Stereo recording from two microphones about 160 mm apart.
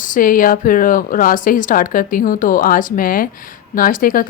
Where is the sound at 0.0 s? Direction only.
55° left (ahead or behind).